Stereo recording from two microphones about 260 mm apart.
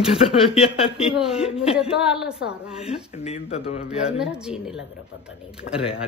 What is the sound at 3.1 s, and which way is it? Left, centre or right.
Speech, left.